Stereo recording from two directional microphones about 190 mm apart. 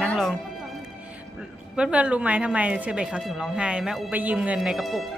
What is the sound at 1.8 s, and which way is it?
A woman's voice, 5° right (ahead or behind).